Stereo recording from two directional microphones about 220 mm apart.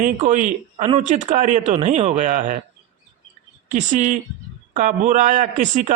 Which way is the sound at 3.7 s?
35° right (ahead or behind).